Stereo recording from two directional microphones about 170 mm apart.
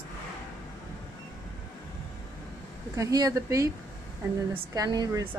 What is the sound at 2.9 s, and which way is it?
A woman's voice, 20° right (ahead or behind).